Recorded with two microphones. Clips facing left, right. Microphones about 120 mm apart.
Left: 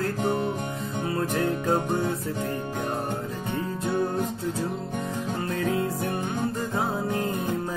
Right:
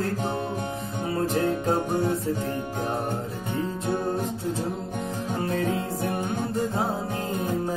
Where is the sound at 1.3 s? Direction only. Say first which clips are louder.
Even; 25° right (ahead or behind).